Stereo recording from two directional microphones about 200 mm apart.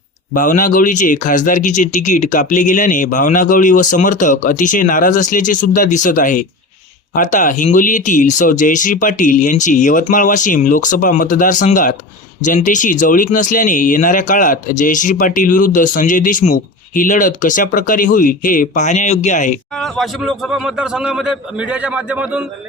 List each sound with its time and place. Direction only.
0.3 s speech: 40° left (ahead or behind)
19.7 s a man's voice: centre (ahead or behind)